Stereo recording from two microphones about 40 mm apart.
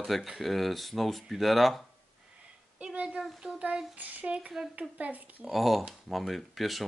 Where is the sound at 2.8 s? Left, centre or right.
Right.